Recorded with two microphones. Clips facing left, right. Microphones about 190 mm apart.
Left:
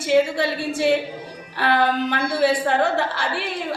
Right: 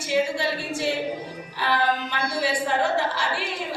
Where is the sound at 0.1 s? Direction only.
60° left (ahead or behind).